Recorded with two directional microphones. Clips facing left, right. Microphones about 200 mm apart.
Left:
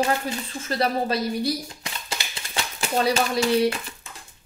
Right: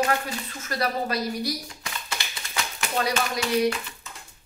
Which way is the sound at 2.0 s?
30° left (ahead or behind).